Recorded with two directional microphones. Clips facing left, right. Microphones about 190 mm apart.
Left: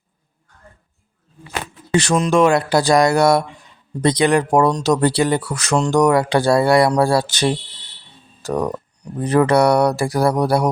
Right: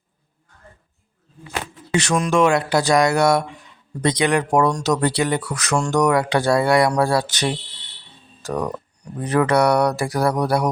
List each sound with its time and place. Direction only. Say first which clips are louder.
2.0 s speech: left 3 dB; 30° left (ahead or behind)